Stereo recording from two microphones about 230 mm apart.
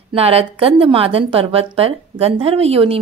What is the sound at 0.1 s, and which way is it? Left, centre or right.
A woman's voice, right.